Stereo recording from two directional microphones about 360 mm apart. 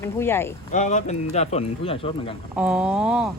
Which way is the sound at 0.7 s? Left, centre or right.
Centre.